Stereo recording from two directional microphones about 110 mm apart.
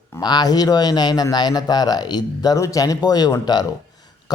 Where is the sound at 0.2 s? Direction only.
40° left (ahead or behind).